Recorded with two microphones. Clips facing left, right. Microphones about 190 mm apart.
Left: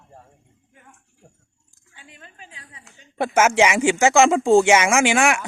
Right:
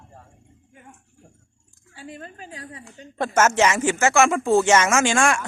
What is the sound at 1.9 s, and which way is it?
A woman's voice, 40° right (ahead or behind).